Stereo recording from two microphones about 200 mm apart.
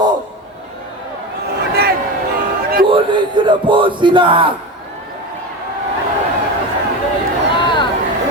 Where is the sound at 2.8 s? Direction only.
25° right (ahead or behind).